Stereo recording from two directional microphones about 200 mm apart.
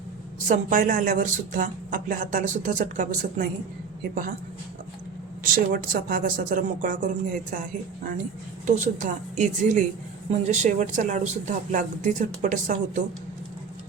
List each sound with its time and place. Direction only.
0.4 s a woman's voice: 40° right (ahead or behind)
5.4 s speech: 45° right (ahead or behind)
8.6 s a woman's voice: 40° right (ahead or behind)